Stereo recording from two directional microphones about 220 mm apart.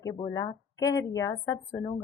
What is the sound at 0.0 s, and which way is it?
A woman's voice, 15° left (ahead or behind).